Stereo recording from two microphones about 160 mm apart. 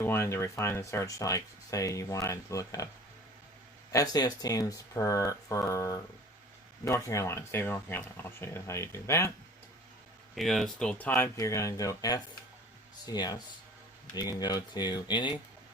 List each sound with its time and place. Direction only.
0.0 s speech: 15° left (ahead or behind)
3.9 s speech: 25° left (ahead or behind)
10.3 s speech: centre (ahead or behind); by 15.4 s 30° left (ahead or behind)